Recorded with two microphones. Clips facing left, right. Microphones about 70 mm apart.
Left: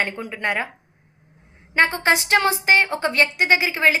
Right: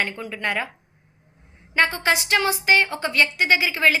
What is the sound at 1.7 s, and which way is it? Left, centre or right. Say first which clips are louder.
A woman's voice: left 2 dB; left.